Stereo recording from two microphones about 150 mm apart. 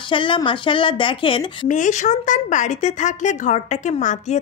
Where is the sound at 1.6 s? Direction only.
55° left (ahead or behind).